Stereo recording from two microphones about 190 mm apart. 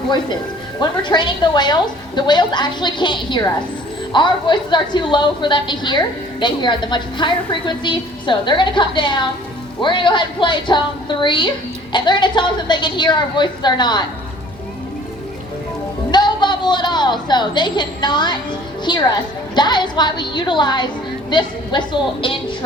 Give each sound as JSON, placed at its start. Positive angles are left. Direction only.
{"t": 0.8, "sound": "a woman's voice", "side_deg": 25}
{"t": 16.1, "sound": "a woman's voice", "side_deg": 25}